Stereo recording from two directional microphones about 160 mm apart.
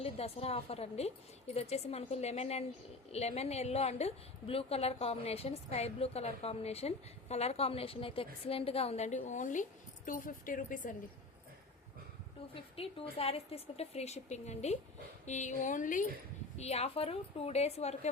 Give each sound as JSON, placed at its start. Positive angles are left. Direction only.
{"t": 0.0, "sound": "a woman's voice", "side_deg": 40}
{"t": 12.5, "sound": "a woman's voice", "side_deg": 35}
{"t": 16.6, "sound": "a woman's voice", "side_deg": 40}